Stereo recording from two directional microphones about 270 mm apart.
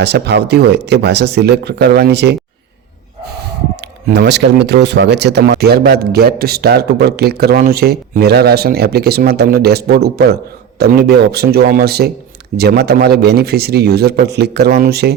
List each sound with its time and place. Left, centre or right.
0.0 s speech: right
4.1 s speech: right